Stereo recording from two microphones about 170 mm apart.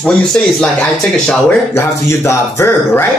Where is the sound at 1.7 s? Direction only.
15° left (ahead or behind).